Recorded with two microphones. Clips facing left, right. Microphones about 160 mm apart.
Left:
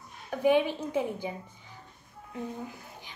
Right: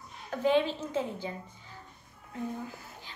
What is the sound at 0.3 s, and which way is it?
A woman's voice, 10° left (ahead or behind).